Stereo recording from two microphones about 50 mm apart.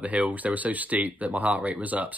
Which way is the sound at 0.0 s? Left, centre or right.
Right.